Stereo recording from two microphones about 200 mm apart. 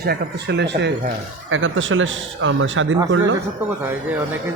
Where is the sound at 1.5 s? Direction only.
75° right (ahead or behind).